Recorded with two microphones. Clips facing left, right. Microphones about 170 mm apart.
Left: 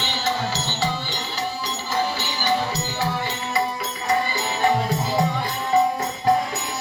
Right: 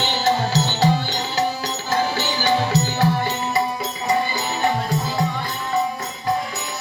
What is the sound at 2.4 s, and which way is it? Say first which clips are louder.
Music: right 3 dB; 65° right (ahead or behind).